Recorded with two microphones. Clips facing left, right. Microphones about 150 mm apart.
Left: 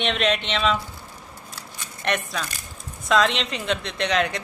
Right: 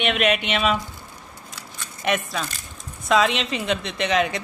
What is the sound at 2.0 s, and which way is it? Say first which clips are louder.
Speech: right 2 dB; 5° right (ahead or behind).